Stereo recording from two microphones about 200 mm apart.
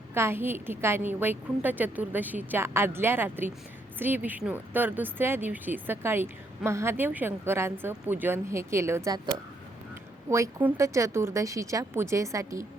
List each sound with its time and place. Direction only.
0.1 s speech: 10° right (ahead or behind)